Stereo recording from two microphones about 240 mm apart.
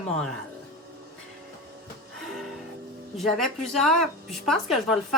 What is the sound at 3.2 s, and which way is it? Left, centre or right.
Speech, centre.